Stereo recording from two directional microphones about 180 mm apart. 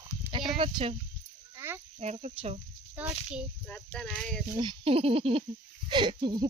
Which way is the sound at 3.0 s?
5° right (ahead or behind).